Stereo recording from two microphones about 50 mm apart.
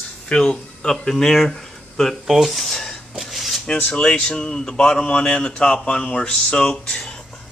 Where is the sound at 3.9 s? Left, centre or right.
Centre.